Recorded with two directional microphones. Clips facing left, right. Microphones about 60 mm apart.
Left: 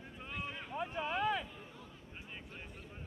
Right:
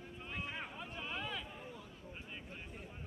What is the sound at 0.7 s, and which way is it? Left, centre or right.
Speech, left.